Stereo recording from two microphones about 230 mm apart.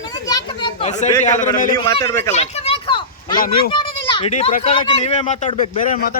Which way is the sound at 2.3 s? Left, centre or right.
Left.